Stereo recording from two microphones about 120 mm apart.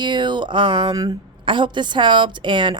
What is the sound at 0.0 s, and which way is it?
A woman's voice, 40° right (ahead or behind).